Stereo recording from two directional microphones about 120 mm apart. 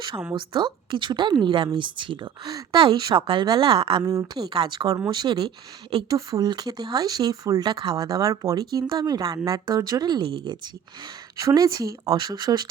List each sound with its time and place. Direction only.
0.3 s speech: 40° right (ahead or behind)
4.0 s speech: 20° right (ahead or behind)
4.4 s speech: 40° right (ahead or behind)
11.4 s speech: 30° right (ahead or behind)
12.0 s speech: 40° right (ahead or behind)